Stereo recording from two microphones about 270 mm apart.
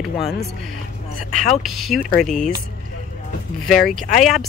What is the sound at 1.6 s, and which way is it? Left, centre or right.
Speech, centre.